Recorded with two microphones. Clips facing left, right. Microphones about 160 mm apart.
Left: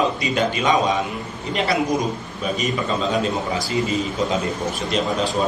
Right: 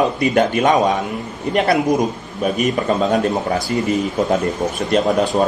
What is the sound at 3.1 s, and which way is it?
A man's voice, 50° right (ahead or behind).